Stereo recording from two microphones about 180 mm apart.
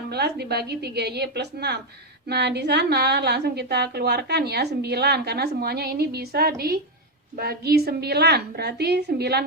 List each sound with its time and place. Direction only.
0.1 s a woman's voice: 65° right (ahead or behind)